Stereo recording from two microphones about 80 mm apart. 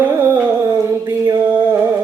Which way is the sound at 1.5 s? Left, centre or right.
Right.